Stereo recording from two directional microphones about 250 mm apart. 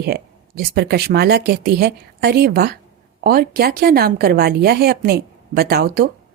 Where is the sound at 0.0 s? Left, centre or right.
Right.